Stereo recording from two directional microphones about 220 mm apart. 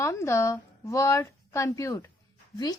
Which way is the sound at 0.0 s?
10° left (ahead or behind).